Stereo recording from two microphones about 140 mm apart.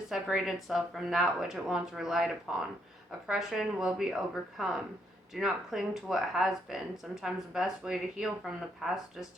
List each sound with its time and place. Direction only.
0.1 s speech: 5° right (ahead or behind)